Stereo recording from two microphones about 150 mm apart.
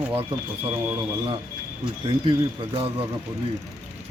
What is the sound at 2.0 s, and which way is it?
Speech, 35° right (ahead or behind).